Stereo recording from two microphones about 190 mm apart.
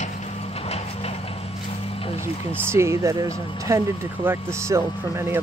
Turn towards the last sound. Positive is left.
turn(degrees=-15)  # may be behind; listen again after turning